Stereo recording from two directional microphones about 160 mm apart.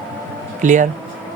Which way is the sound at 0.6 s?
50° right (ahead or behind).